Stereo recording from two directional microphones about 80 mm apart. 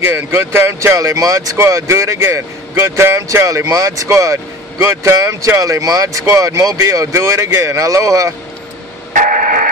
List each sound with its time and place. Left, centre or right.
0.0 s speech: right